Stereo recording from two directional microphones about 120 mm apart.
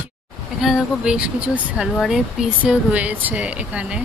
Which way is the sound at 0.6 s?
5° right (ahead or behind).